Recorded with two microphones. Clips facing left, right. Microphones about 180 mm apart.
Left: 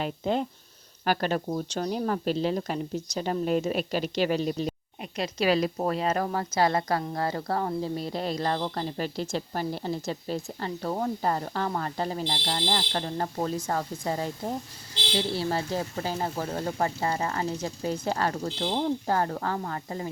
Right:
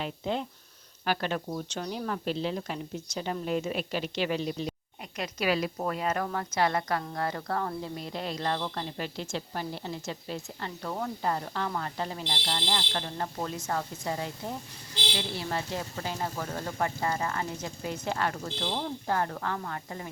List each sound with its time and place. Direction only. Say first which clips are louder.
0.0 s a woman's voice: left 4 dB; 45° left (ahead or behind)
5.1 s a woman's voice: left 4 dB; 30° left (ahead or behind)